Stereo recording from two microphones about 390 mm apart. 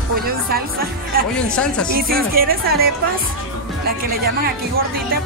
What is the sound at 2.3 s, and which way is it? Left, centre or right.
Speech, right.